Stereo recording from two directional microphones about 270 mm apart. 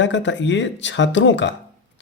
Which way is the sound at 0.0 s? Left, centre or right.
Left.